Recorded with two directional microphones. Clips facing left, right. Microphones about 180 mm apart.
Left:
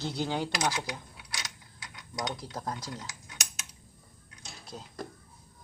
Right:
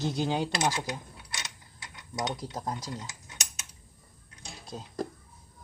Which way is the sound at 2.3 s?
15° right (ahead or behind).